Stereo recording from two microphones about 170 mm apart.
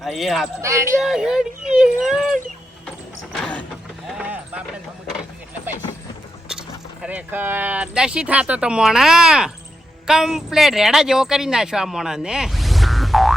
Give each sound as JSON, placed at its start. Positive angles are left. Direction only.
{"t": 0.0, "sound": "speech", "side_deg": 0}
{"t": 0.6, "sound": "speech", "side_deg": -15}
{"t": 0.9, "sound": "speech", "side_deg": 0}
{"t": 4.2, "sound": "clip-clop", "side_deg": -10}
{"t": 6.5, "sound": "speech", "side_deg": -5}